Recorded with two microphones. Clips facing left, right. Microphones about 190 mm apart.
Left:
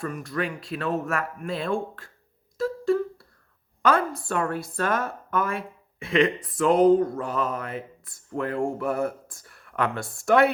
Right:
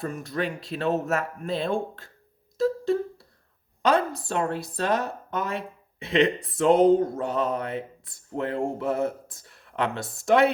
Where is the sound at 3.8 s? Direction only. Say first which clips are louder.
Even; 20° right (ahead or behind).